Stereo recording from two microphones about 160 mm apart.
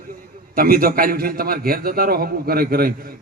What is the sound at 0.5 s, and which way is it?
A man's voice, 65° right (ahead or behind).